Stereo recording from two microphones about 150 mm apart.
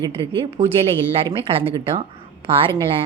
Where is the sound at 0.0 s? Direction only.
35° right (ahead or behind).